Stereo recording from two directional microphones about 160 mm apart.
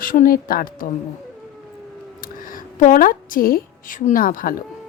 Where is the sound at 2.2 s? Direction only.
60° left (ahead or behind).